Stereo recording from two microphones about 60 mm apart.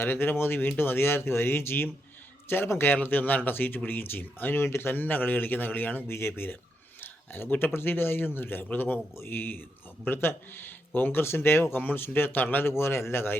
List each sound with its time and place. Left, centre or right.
0.0 s speech: left
12.7 s speech: left